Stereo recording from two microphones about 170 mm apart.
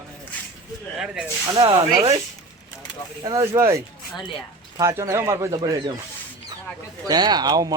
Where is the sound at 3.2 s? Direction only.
20° right (ahead or behind).